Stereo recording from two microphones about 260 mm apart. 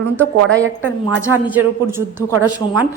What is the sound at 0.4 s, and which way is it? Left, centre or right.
Speech, right.